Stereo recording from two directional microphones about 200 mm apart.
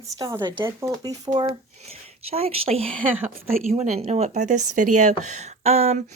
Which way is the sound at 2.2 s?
30° right (ahead or behind).